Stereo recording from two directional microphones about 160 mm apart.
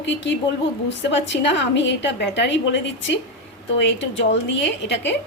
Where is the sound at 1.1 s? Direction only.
90° left.